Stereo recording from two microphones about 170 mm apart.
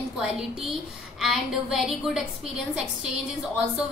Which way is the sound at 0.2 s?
5° right (ahead or behind).